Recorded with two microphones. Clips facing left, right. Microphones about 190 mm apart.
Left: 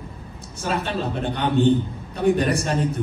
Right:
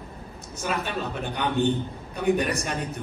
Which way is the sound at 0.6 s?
30° left (ahead or behind).